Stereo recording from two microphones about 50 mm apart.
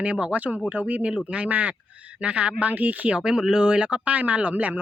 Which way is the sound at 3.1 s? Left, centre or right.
Centre.